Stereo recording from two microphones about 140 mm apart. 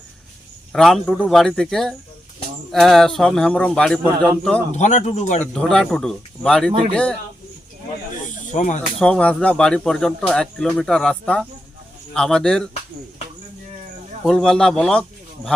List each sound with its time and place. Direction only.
0.7 s speech: centre (ahead or behind)
4.7 s speech: 60° left (ahead or behind)
5.4 s speech: 5° left (ahead or behind)
8.5 s speech: 65° left (ahead or behind)
9.0 s speech: 5° left (ahead or behind)
14.3 s speech: 5° left (ahead or behind)